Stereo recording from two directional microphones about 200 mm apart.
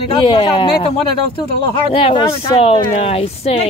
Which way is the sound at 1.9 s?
25° left (ahead or behind).